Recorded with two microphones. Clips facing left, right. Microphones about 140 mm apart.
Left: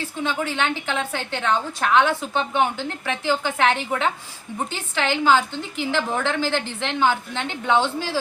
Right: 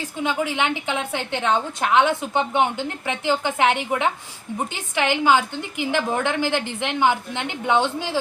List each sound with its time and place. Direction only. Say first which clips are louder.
0.2 s a woman's voice: right 2 dB; 10° right (ahead or behind)